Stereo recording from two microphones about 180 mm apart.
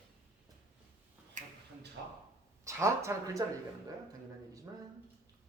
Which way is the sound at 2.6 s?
15° right (ahead or behind).